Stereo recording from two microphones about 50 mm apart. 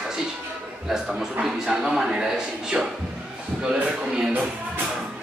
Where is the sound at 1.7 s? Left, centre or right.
Centre.